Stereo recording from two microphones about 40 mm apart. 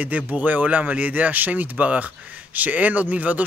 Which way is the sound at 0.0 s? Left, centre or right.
Right.